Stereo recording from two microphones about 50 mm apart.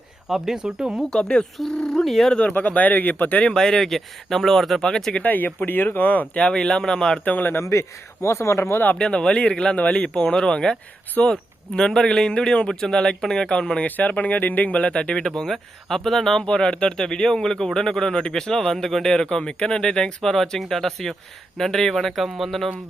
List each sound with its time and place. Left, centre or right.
0.3 s speech: centre
1.2 s a man's voice: centre
1.5 s a man's voice: centre
2.5 s speech: left
3.4 s a man's voice: centre
5.2 s speech: left
6.3 s a man's voice: centre
7.3 s speech: left
7.6 s speech: left
9.0 s a man's voice: centre
13.8 s speech: left
15.4 s a man's voice: centre
16.5 s a man's voice: centre